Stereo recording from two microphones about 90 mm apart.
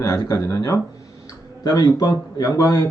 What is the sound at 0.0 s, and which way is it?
Speech, 45° left (ahead or behind).